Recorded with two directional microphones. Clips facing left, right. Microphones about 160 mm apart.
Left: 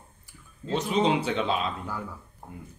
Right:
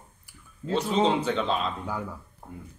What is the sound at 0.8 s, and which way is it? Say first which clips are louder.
Speech: even; 10° left (ahead or behind).